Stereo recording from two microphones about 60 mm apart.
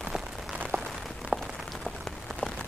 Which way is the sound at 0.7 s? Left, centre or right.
Right.